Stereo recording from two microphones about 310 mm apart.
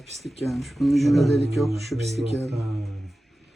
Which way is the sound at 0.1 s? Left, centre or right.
Centre.